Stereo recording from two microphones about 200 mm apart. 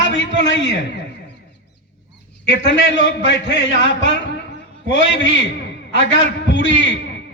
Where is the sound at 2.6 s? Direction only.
65° left (ahead or behind).